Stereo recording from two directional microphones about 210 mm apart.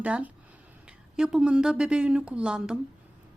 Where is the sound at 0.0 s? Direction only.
5° right (ahead or behind).